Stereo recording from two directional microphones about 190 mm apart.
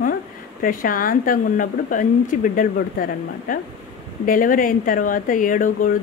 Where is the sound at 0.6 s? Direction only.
45° left (ahead or behind).